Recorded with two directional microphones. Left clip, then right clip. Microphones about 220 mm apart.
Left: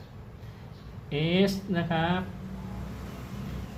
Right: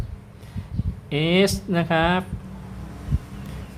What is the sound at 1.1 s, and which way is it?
Speech, 30° right (ahead or behind).